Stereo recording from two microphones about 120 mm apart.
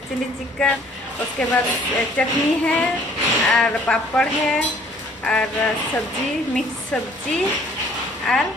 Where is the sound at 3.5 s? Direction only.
5° left (ahead or behind).